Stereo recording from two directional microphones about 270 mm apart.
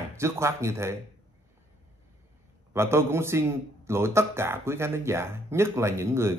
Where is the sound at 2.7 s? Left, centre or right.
Centre.